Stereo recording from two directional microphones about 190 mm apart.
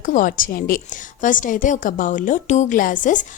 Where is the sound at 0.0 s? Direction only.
45° left (ahead or behind).